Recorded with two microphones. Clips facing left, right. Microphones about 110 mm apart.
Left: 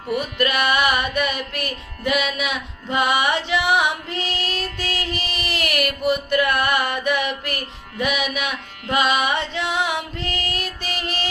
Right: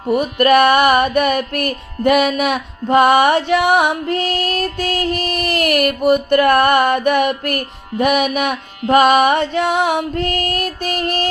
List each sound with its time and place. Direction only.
0.1 s music: 50° right (ahead or behind)